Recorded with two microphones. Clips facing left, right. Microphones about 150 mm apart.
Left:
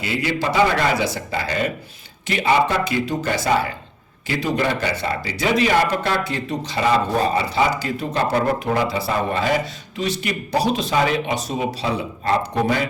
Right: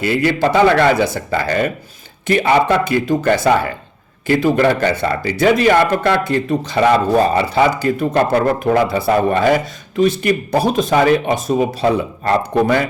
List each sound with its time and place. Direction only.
0.0 s speech: 55° right (ahead or behind)